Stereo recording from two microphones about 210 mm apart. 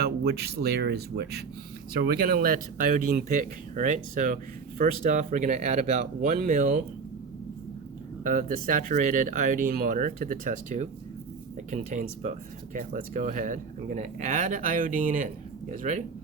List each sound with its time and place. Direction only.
0.0 s speech: 50° right (ahead or behind)
8.2 s speech: 40° right (ahead or behind)